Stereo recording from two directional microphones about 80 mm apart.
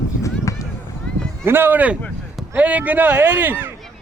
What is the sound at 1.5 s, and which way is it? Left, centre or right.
Speech, right.